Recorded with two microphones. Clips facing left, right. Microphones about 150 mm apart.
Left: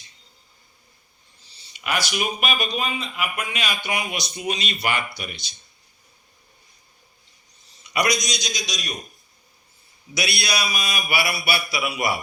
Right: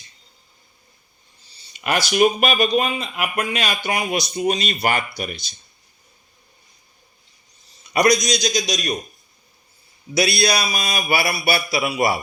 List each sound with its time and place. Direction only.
1.7 s a sound: 10° left (ahead or behind)
2.1 s speech: 45° right (ahead or behind)
7.9 s a man's voice: 40° right (ahead or behind)
10.2 s a man's voice: 35° right (ahead or behind)